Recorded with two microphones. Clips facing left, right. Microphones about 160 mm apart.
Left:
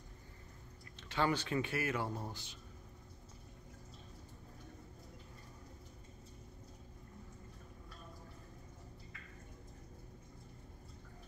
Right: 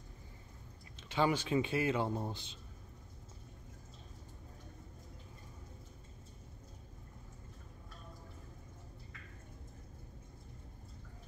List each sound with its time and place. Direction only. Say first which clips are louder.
0.9 s speech: right 2 dB; 15° right (ahead or behind)